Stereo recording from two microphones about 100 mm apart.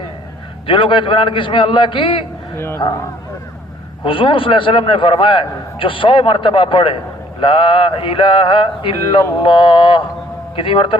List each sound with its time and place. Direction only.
0.7 s a man's voice: 55° left (ahead or behind)
2.6 s a man's voice: 25° left (ahead or behind)
4.0 s a man's voice: 60° left (ahead or behind)